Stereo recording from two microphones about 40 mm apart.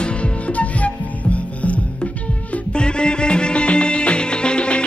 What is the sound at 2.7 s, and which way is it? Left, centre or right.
Music, left.